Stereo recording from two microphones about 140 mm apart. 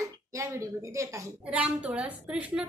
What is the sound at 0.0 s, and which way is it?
A woman's voice, 20° right (ahead or behind).